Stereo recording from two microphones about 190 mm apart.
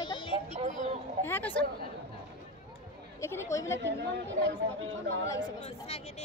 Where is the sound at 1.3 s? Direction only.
10° left (ahead or behind).